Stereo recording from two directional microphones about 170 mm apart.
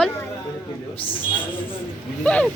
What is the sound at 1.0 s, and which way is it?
Speech, 30° left (ahead or behind).